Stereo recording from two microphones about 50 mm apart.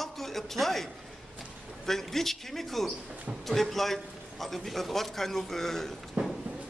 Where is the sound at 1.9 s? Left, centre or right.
Centre.